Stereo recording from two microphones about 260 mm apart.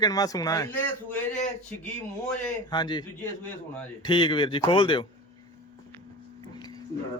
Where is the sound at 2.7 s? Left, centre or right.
Centre.